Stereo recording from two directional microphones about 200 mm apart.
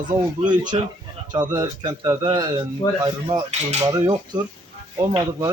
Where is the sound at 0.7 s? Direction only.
25° right (ahead or behind).